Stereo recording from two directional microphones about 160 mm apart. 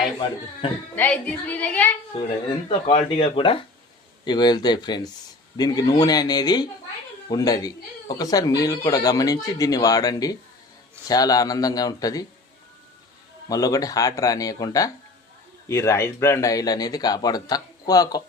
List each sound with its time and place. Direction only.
0.9 s a woman's voice: 10° left (ahead or behind)
2.2 s speech: 40° left (ahead or behind); by 12.2 s 25° left (ahead or behind)
13.5 s speech: 20° left (ahead or behind)